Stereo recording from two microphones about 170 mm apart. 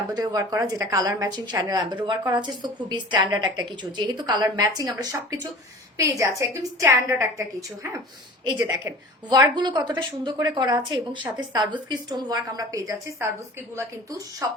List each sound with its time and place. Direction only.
0.1 s a woman's voice: 20° right (ahead or behind)
9.3 s speech: 25° right (ahead or behind)